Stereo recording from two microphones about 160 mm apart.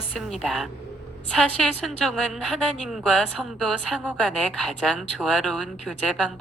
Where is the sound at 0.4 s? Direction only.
Centre (ahead or behind).